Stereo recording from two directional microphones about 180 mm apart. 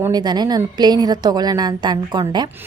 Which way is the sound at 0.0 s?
25° right (ahead or behind).